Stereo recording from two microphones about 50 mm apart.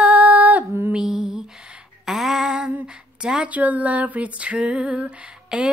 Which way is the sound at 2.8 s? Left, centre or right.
Centre.